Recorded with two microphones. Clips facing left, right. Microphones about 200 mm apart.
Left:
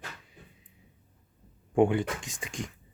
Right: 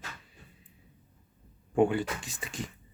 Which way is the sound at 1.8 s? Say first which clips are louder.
Left 1 dB; 20° left (ahead or behind).